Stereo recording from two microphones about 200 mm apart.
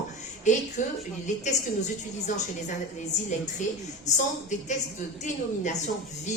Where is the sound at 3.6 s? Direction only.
35° left (ahead or behind).